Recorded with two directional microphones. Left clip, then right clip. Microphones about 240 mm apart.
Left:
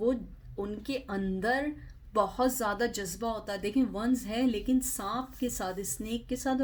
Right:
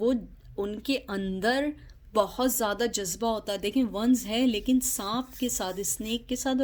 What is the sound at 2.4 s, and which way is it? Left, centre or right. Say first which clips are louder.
Speech: right 2 dB; right.